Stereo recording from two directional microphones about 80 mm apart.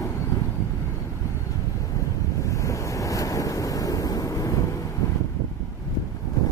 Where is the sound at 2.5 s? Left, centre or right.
Left.